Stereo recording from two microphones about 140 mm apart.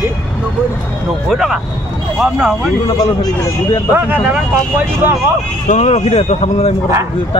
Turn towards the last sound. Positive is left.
turn(degrees=50)  # may be behind; listen again after turning